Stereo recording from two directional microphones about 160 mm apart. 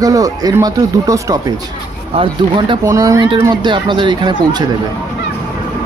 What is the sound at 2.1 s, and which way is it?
Speech, 35° right (ahead or behind).